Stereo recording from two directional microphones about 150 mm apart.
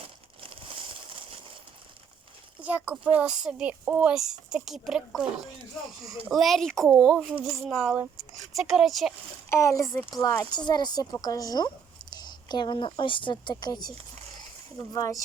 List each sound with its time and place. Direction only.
0.0 s crumpling: 40° right (ahead or behind)
2.6 s speech: 10° right (ahead or behind)
9.5 s speech: 20° left (ahead or behind)